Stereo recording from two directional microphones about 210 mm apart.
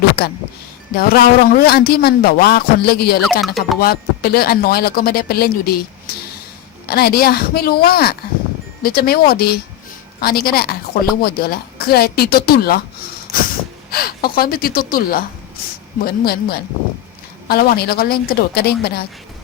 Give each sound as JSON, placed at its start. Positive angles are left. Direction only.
{"t": 0.9, "sound": "a man's voice", "side_deg": 45}
{"t": 3.4, "sound": "speech", "side_deg": 0}
{"t": 3.8, "sound": "a man's voice", "side_deg": 45}
{"t": 6.8, "sound": "a man's voice", "side_deg": 45}
{"t": 13.3, "sound": "a sound", "side_deg": 0}
{"t": 13.9, "sound": "a man's voice", "side_deg": 45}